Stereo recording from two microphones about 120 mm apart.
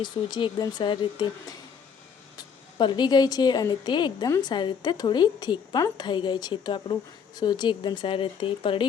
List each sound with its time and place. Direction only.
0.0 s a woman's voice: 40° left (ahead or behind)
2.7 s a woman's voice: 40° left (ahead or behind)